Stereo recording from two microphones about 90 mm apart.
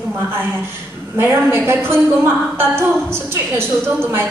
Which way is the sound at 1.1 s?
25° right (ahead or behind).